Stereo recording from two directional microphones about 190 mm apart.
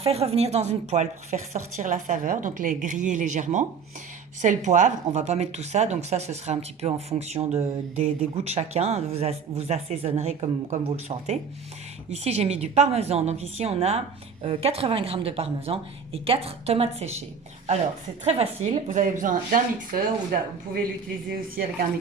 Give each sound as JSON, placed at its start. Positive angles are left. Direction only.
{"t": 0.0, "sound": "speech", "side_deg": -30}
{"t": 18.3, "sound": "speech", "side_deg": -35}